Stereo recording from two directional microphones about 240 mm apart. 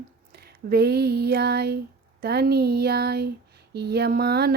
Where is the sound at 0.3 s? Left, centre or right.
Right.